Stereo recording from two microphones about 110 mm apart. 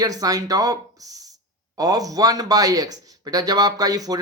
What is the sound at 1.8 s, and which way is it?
Speech, 35° right (ahead or behind).